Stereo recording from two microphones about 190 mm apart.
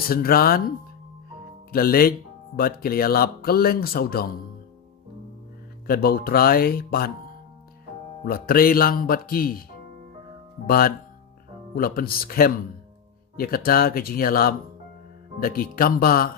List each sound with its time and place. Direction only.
0.1 s speech: 50° left (ahead or behind)
1.7 s speech: 50° left (ahead or behind)
5.9 s speech: 55° left (ahead or behind)
8.2 s speech: 50° left (ahead or behind)
10.7 s speech: 50° left (ahead or behind)